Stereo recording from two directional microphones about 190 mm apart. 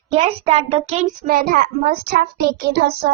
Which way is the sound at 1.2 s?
50° right (ahead or behind).